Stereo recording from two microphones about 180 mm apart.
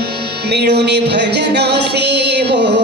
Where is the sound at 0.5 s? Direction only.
70° right (ahead or behind).